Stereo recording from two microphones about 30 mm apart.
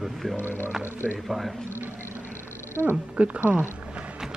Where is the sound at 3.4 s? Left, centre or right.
Right.